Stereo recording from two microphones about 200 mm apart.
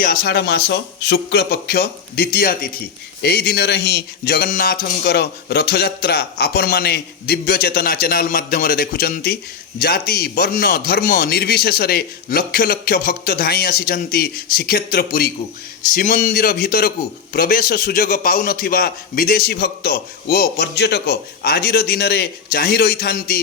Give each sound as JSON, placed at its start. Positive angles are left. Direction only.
{"t": 0.0, "sound": "speech", "side_deg": 45}